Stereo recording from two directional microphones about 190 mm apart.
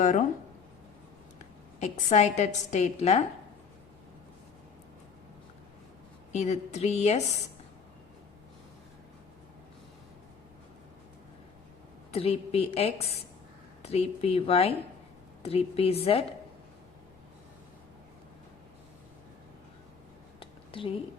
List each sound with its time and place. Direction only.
0.0 s a woman's voice: 40° left (ahead or behind)
1.8 s a woman's voice: 35° left (ahead or behind)
6.3 s a woman's voice: 35° left (ahead or behind)
12.1 s a woman's voice: 30° left (ahead or behind)
20.4 s a sound: 30° left (ahead or behind)